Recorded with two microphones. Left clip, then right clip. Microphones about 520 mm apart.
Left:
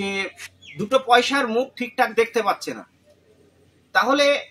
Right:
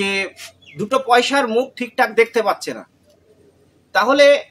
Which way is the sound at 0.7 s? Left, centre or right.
Left.